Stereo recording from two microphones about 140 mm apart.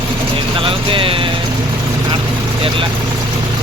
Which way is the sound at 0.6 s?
40° right (ahead or behind).